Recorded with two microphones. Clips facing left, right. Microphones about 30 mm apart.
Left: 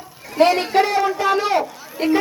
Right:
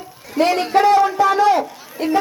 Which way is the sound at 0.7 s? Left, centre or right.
Left.